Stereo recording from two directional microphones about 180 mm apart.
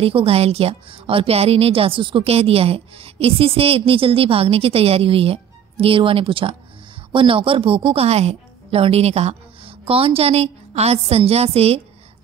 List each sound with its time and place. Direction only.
0.0 s a woman's voice: 30° right (ahead or behind)